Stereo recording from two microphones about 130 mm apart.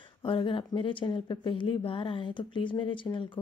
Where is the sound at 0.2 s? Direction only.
40° left (ahead or behind).